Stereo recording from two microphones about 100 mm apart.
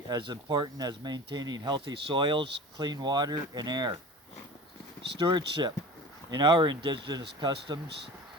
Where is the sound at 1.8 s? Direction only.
60° right (ahead or behind).